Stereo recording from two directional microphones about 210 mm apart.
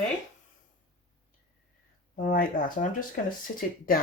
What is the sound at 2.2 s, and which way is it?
Speech, 40° left (ahead or behind).